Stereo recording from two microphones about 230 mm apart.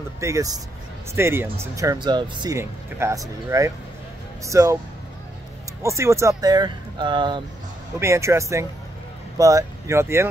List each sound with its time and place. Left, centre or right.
0.2 s speech: centre
5.8 s speech: centre